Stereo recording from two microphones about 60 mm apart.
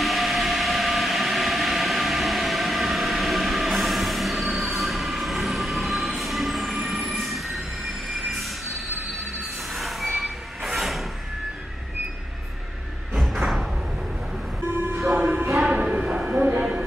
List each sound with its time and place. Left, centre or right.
0.0 s train: centre
9.8 s train: centre
13.1 s music: centre
15.1 s music: right
15.6 s music: centre
16.3 s a sound: right